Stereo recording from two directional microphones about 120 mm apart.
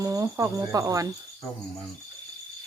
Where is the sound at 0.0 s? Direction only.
25° right (ahead or behind).